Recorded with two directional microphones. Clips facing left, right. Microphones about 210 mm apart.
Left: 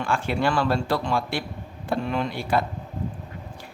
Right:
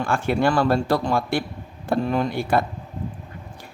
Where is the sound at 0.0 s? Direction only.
45° right (ahead or behind).